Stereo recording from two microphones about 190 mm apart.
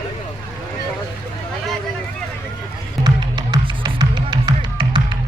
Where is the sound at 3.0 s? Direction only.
20° right (ahead or behind).